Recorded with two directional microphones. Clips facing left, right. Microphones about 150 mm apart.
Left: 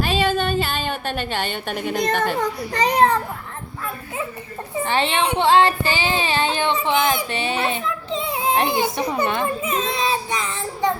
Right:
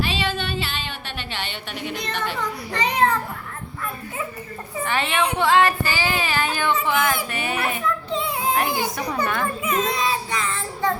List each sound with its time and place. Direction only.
0.0 s a woman's voice: 45° left (ahead or behind)
4.8 s speech: 30° left (ahead or behind)